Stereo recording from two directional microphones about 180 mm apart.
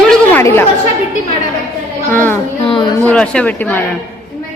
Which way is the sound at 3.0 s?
5° left (ahead or behind).